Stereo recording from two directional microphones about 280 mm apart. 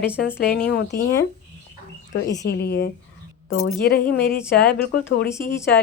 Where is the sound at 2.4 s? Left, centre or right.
Left.